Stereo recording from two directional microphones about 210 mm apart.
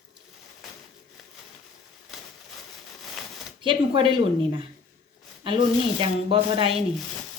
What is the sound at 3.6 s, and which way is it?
Speech, 25° right (ahead or behind).